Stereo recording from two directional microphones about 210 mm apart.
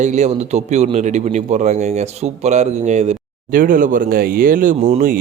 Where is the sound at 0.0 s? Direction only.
35° right (ahead or behind).